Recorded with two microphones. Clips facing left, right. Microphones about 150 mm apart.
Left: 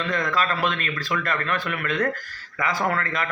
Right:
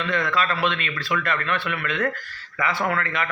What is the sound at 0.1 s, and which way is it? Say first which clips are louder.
A man's voice: right 1 dB; 40° left (ahead or behind).